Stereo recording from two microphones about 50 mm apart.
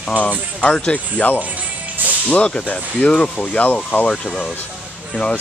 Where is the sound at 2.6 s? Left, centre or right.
Left.